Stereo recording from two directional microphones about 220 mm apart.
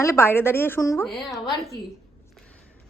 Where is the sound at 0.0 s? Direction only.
10° left (ahead or behind).